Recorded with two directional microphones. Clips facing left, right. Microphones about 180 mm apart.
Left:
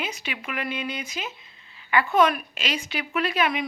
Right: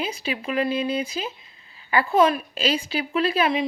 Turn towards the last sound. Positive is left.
turn(degrees=-30)  # may be behind; listen again after turning